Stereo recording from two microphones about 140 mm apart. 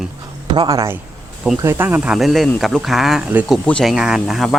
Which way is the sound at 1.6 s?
15° right (ahead or behind).